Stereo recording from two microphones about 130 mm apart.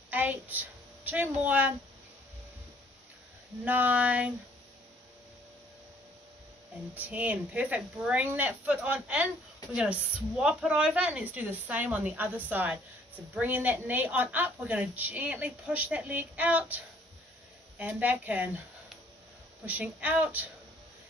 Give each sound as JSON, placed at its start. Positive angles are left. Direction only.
{"t": 0.1, "sound": "a woman's voice", "side_deg": -10}
{"t": 3.6, "sound": "a woman's voice", "side_deg": -10}
{"t": 6.9, "sound": "a woman's voice", "side_deg": -10}
{"t": 19.6, "sound": "a woman's voice", "side_deg": -10}